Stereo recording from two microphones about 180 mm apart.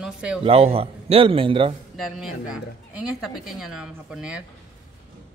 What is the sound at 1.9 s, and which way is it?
Speech, centre (ahead or behind).